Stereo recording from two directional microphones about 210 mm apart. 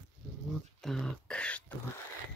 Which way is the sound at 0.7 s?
Centre (ahead or behind).